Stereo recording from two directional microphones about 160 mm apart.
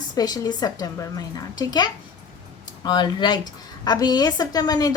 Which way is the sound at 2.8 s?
30° left (ahead or behind).